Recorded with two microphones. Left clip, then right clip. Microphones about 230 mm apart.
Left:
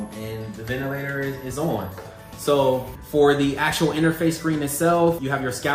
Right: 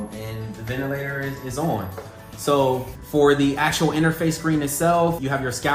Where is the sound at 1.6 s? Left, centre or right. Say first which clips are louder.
Right 1 dB; right.